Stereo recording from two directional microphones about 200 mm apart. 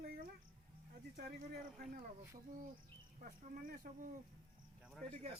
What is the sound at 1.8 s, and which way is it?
Speech, 50° right (ahead or behind).